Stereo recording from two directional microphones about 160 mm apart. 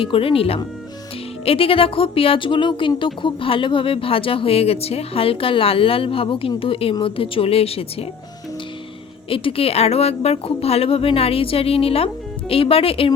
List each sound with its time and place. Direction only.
0.0 s speech: 35° left (ahead or behind)
9.3 s speech: 35° left (ahead or behind)